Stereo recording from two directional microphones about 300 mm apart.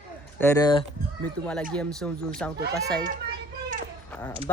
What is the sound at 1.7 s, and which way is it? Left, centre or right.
Speech, centre.